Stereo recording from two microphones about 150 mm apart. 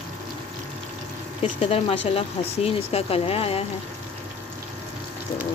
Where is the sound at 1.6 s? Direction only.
40° left (ahead or behind).